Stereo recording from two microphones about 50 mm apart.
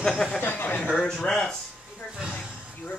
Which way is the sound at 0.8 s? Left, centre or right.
Centre.